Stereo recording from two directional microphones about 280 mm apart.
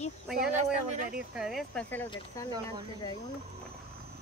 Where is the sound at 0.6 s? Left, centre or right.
Right.